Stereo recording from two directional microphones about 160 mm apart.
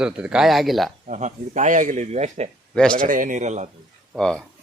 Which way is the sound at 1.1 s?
50° right (ahead or behind).